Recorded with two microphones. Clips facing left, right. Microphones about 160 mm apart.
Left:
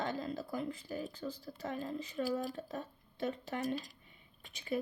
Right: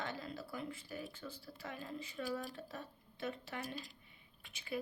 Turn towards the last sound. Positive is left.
turn(degrees=40)  # may be behind; listen again after turning